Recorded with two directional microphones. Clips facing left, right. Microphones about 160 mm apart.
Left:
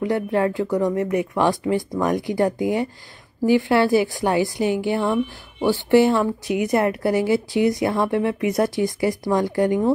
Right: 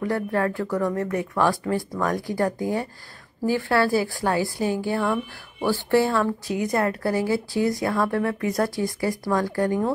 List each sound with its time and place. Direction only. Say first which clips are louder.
0.0 s a woman's voice: left 3 dB; 20° left (ahead or behind)